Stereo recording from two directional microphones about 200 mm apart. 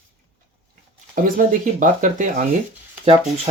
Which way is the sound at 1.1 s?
45° right (ahead or behind).